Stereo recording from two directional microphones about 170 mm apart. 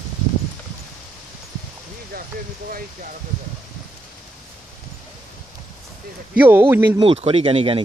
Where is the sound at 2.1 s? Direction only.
60° right (ahead or behind).